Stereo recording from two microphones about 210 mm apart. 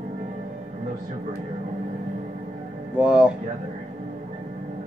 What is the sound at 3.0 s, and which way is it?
Speech, 5° right (ahead or behind).